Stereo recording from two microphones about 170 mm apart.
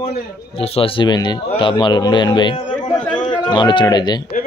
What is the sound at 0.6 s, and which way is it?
A man's voice, 35° left (ahead or behind).